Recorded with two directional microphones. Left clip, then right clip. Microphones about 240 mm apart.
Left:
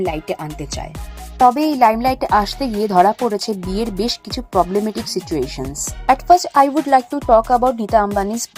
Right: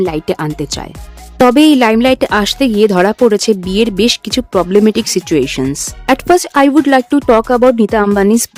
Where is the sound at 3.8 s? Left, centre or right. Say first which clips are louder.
Right 8 dB; right.